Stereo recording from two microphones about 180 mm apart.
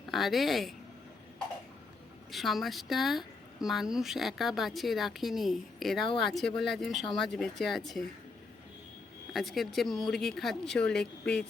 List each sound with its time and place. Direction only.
0.1 s speech: centre (ahead or behind)
2.3 s speech: centre (ahead or behind)
9.3 s speech: centre (ahead or behind)